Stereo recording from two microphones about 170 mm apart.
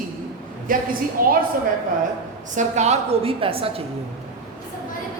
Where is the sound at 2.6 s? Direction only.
40° right (ahead or behind).